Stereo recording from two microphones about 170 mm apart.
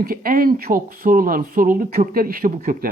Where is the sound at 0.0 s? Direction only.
60° right (ahead or behind).